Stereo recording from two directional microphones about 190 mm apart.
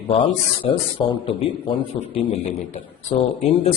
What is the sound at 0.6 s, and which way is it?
A man's voice, 25° left (ahead or behind).